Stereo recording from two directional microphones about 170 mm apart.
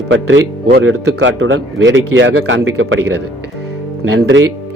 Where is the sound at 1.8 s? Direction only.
90° right.